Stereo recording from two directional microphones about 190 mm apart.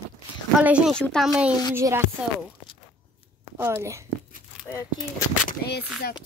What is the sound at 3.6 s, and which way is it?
Speech, 15° right (ahead or behind).